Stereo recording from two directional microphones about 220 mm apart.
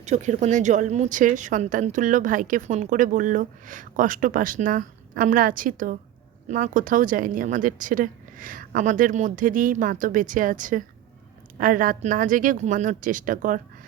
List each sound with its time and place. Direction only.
0.0 s a woman's voice: 30° right (ahead or behind)